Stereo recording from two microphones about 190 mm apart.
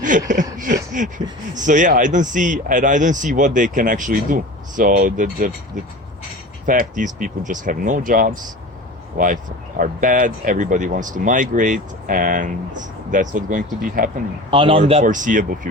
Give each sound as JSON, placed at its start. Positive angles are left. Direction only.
{"t": 0.0, "sound": "a sound", "side_deg": -40}
{"t": 1.5, "sound": "speech", "side_deg": -40}
{"t": 14.5, "sound": "speech", "side_deg": -25}
{"t": 15.0, "sound": "speech", "side_deg": -45}